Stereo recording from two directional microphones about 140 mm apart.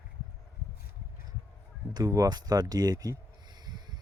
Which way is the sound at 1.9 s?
25° right (ahead or behind).